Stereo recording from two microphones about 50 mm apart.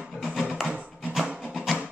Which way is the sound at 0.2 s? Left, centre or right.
Centre.